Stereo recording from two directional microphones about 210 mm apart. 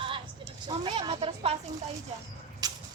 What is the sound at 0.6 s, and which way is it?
Speech, 25° right (ahead or behind).